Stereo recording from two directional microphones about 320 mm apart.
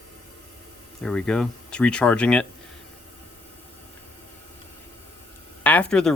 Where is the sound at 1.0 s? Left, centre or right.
Centre.